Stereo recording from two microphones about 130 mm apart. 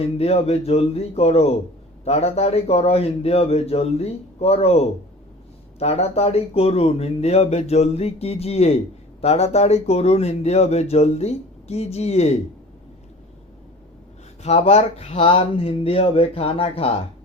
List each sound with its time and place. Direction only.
0.0 s speech: 50° left (ahead or behind)
14.4 s speech: 55° left (ahead or behind)
15.2 s speech: 40° left (ahead or behind)